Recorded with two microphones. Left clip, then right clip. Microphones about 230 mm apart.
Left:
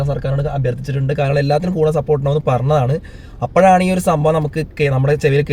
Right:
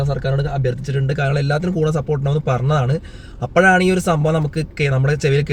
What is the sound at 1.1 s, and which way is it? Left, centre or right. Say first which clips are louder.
Speech: left 5 dB; centre.